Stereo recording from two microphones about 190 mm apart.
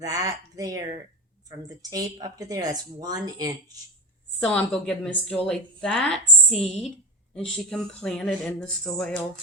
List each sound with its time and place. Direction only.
0.0 s speech: 20° right (ahead or behind)
4.4 s speech: 5° left (ahead or behind)